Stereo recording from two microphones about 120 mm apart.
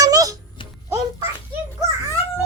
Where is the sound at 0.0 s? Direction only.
30° right (ahead or behind).